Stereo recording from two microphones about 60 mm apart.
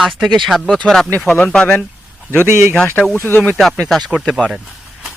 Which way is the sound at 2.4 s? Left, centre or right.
Right.